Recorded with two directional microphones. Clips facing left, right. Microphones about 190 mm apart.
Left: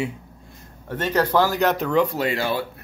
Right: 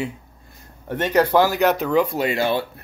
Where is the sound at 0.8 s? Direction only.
15° right (ahead or behind).